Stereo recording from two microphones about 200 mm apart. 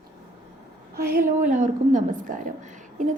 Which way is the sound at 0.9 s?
45° right (ahead or behind).